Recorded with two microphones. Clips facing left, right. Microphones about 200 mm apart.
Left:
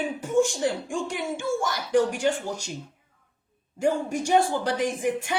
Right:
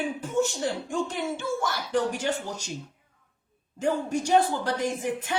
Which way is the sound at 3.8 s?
15° left (ahead or behind).